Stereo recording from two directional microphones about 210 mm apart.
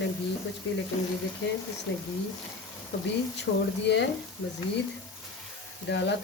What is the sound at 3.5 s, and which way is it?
Speech, 60° left (ahead or behind).